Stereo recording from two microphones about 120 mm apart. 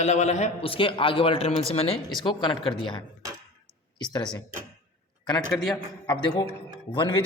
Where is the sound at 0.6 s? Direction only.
45° left (ahead or behind).